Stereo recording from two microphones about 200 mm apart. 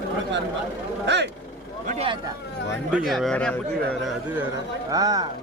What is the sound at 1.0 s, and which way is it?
Vehicle, 60° right (ahead or behind).